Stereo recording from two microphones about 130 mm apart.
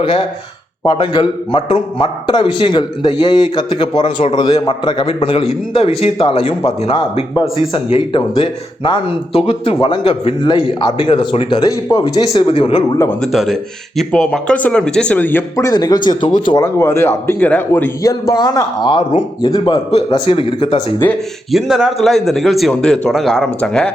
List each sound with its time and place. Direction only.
0.0 s a man's voice: 45° left (ahead or behind)
13.3 s speech: centre (ahead or behind); by 16.6 s 35° left (ahead or behind)
16.6 s speech: 20° left (ahead or behind)
18.1 s a man's voice: 30° left (ahead or behind)
19.5 s speech: 30° left (ahead or behind)
20.1 s a man's voice: 45° left (ahead or behind)
21.5 s speech: 5° right (ahead or behind)